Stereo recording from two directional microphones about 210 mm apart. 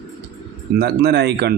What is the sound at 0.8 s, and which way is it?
Speech, 50° right (ahead or behind).